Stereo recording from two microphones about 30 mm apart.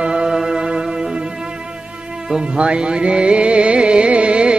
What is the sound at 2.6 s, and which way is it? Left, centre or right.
Music, right.